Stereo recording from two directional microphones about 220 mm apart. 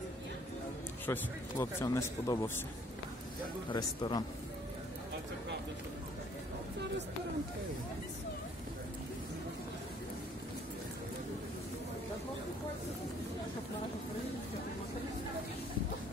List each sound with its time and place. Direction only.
1.0 s speech: 10° left (ahead or behind)
3.7 s speech: 20° left (ahead or behind)